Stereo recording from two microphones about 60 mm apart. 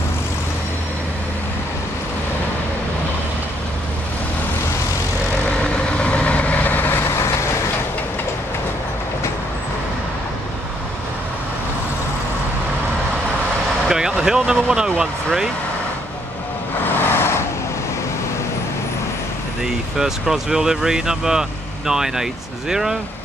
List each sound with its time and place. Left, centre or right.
5.6 s vehicle: centre
13.8 s vehicle: centre
15.0 s speech: centre
17.1 s vehicle: left
19.6 s speech: centre